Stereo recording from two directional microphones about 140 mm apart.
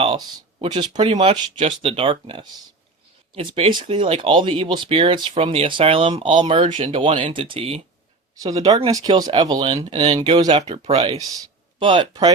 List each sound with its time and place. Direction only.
0.6 s speech: 35° right (ahead or behind)
8.6 s speech: 30° right (ahead or behind)
10.6 s speech: 45° right (ahead or behind)